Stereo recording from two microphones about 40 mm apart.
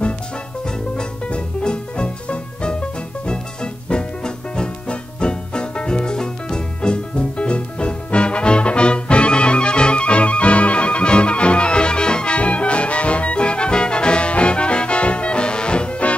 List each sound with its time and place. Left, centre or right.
1.3 s music: left